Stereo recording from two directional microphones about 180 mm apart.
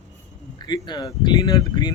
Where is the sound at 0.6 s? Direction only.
25° left (ahead or behind).